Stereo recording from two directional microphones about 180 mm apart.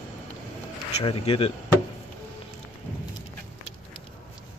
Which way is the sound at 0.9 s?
35° left (ahead or behind).